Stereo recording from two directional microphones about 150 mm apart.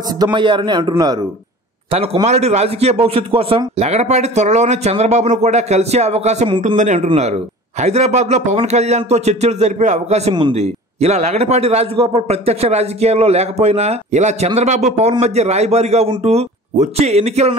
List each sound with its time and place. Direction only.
0.2 s a man's voice: 30° right (ahead or behind)
2.2 s a man's voice: 45° right (ahead or behind)